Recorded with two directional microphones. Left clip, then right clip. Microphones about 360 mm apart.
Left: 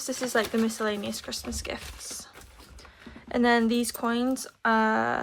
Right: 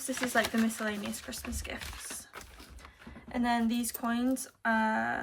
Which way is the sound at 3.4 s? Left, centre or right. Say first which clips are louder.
Left 8 dB; centre.